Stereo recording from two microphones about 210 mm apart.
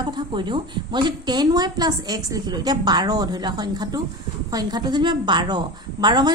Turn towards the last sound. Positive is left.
turn(degrees=-20)  # may be behind; listen again after turning